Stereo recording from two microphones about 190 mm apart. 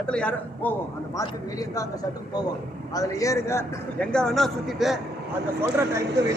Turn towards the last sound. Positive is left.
turn(degrees=-65)  # may be behind; listen again after turning